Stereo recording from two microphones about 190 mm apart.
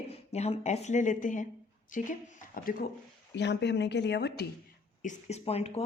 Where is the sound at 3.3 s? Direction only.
65° left (ahead or behind).